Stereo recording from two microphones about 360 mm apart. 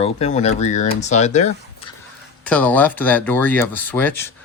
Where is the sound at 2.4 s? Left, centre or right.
Centre.